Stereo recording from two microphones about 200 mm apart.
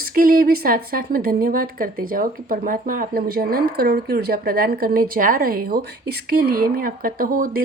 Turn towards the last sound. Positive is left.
turn(degrees=-45)  # may be behind; listen again after turning